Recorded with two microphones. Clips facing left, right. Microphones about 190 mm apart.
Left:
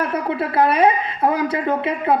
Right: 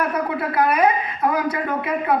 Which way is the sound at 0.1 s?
30° left (ahead or behind).